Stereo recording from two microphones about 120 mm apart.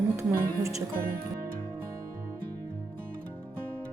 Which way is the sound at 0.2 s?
20° right (ahead or behind).